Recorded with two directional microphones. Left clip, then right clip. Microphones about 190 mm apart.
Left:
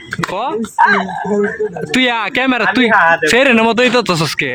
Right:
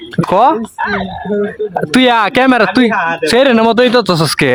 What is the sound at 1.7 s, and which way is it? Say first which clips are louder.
Speech: right 7 dB; 25° right (ahead or behind).